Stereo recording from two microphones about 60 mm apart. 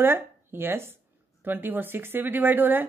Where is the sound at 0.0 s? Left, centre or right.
Right.